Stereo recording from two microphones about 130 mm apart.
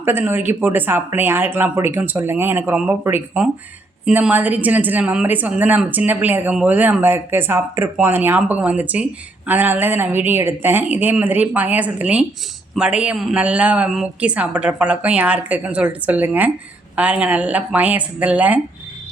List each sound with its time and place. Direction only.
0.0 s a woman's voice: 15° right (ahead or behind)